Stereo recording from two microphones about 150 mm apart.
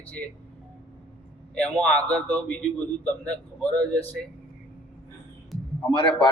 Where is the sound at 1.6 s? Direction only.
10° left (ahead or behind).